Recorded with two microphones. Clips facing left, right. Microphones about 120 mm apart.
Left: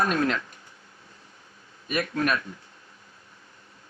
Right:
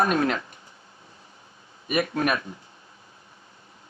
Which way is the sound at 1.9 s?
20° right (ahead or behind).